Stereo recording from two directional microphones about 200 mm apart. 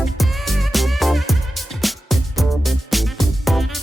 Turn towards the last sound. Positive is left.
turn(degrees=0)  # may be behind; listen again after turning